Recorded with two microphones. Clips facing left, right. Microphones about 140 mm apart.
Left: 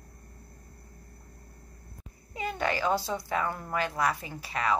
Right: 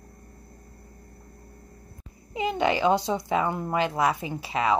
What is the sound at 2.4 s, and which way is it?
Speech, 20° right (ahead or behind).